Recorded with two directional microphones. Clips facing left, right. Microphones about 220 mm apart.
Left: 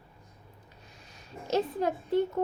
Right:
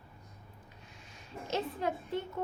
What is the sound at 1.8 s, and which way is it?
Speech, 40° left (ahead or behind).